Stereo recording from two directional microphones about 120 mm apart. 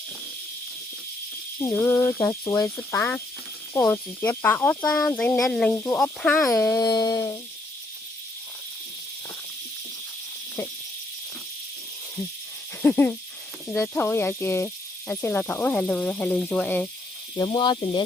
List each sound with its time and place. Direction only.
1.6 s speech: 25° left (ahead or behind); by 5.7 s 5° left (ahead or behind)
5.7 s speech: 20° left (ahead or behind)
12.8 s speech: 15° left (ahead or behind)
17.3 s speech: 35° left (ahead or behind)